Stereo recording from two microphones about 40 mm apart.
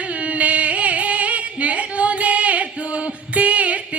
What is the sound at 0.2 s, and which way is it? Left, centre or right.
Music, right.